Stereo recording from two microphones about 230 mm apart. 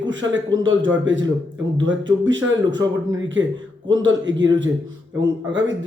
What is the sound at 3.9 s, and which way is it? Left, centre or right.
Speech, right.